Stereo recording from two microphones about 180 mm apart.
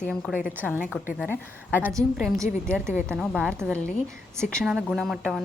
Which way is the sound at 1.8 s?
20° right (ahead or behind).